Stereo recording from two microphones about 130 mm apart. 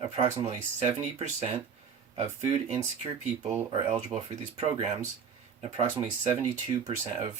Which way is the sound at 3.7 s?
50° right (ahead or behind).